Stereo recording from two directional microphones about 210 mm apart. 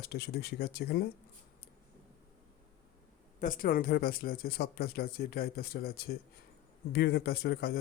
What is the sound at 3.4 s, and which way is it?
Speech, 40° left (ahead or behind).